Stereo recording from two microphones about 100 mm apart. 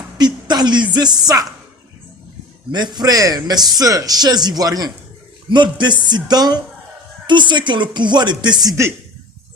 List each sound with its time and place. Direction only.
0.2 s speech: 45° right (ahead or behind)
2.7 s a man's voice: 45° right (ahead or behind)
5.5 s speech: 50° right (ahead or behind)